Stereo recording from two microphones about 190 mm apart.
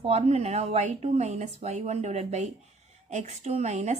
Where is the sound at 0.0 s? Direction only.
35° right (ahead or behind).